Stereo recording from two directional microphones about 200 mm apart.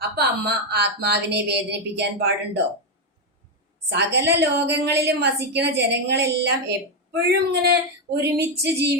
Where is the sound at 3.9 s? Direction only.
60° right (ahead or behind).